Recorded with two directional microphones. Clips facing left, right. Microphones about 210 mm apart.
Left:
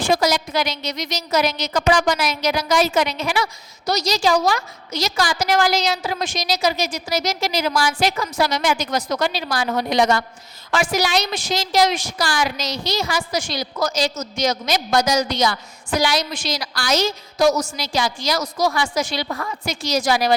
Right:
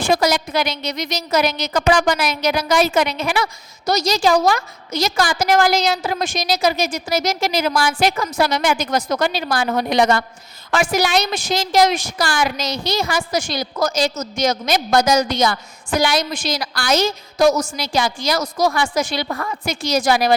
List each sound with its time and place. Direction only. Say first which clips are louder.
0.0 s a woman's voice: right 1 dB; 55° right (ahead or behind)